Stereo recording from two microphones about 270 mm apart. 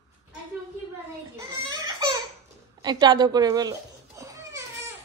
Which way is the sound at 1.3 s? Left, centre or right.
Centre.